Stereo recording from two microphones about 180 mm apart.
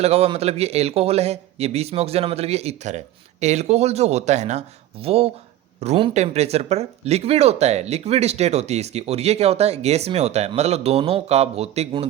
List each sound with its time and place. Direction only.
0.0 s speech: 35° right (ahead or behind)